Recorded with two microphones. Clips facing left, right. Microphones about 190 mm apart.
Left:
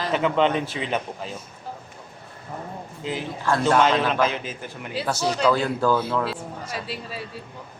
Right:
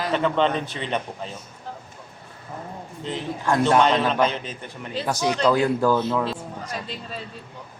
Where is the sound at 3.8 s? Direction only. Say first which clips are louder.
Right 1 dB; 5° left (ahead or behind).